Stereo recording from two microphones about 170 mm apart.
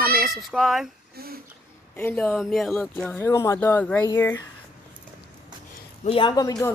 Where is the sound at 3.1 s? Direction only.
15° left (ahead or behind).